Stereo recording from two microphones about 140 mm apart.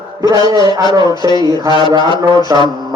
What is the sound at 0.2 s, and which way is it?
Speech, 30° right (ahead or behind).